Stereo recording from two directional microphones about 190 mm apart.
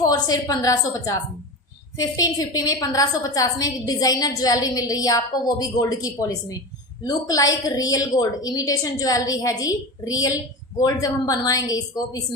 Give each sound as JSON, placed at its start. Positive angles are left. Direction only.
{"t": 0.0, "sound": "a woman's voice", "side_deg": 20}